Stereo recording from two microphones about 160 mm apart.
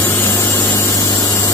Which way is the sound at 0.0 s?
15° left (ahead or behind).